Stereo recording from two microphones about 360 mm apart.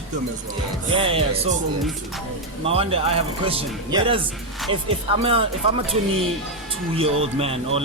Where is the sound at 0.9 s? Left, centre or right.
Centre.